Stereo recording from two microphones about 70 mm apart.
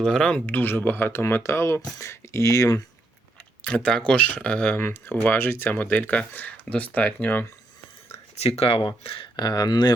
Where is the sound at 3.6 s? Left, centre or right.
Centre.